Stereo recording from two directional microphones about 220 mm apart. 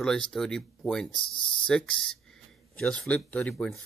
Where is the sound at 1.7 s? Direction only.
5° left (ahead or behind).